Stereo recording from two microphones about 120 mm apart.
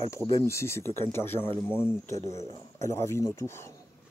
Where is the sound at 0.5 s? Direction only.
20° left (ahead or behind).